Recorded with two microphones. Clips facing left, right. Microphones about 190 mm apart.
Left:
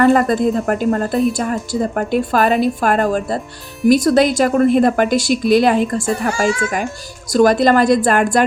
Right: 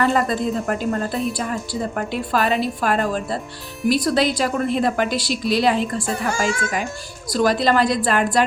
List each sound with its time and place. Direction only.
0.0 s speech: 50° left (ahead or behind)
7.3 s speech: 50° left (ahead or behind)